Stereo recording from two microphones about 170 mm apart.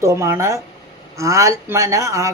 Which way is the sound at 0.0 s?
15° right (ahead or behind).